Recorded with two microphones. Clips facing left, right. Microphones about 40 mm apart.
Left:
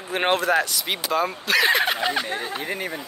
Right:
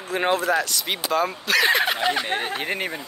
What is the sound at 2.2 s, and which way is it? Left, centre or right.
Speech, right.